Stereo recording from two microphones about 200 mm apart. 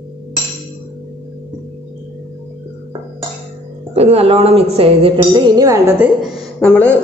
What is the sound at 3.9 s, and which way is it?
A woman's voice, 30° right (ahead or behind).